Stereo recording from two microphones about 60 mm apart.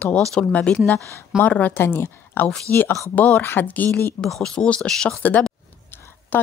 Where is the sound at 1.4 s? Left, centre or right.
Left.